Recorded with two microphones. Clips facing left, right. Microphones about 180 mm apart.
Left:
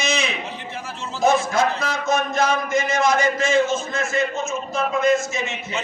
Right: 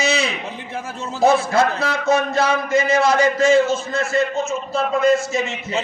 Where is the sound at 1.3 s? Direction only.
60° right (ahead or behind).